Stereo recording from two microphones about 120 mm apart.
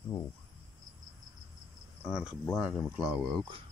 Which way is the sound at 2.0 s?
10° right (ahead or behind).